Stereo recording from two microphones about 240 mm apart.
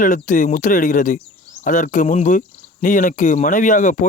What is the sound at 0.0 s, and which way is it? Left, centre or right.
Speech, left.